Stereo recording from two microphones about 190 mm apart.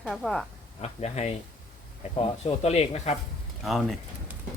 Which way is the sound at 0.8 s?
35° left (ahead or behind).